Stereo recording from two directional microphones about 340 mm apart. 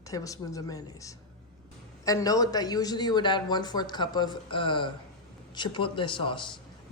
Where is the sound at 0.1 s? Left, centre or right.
Centre.